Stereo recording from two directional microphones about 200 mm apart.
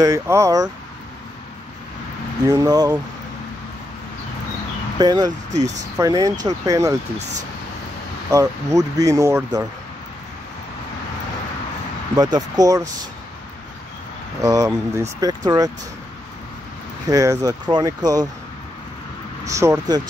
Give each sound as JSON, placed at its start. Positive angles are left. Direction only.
{"t": 0.0, "sound": "speech", "side_deg": -15}
{"t": 2.4, "sound": "speech", "side_deg": -20}
{"t": 4.9, "sound": "speech", "side_deg": -20}
{"t": 8.3, "sound": "speech", "side_deg": -15}
{"t": 12.2, "sound": "speech", "side_deg": -20}
{"t": 14.4, "sound": "speech", "side_deg": -15}
{"t": 17.1, "sound": "speech", "side_deg": -15}
{"t": 19.4, "sound": "speech", "side_deg": -15}